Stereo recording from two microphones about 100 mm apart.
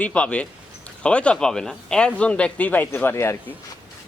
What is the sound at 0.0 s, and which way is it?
Speech, 15° left (ahead or behind).